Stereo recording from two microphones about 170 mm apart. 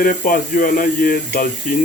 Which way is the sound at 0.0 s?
55° left (ahead or behind).